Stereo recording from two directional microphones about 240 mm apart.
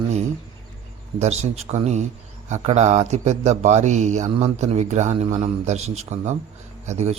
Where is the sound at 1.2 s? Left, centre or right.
Right.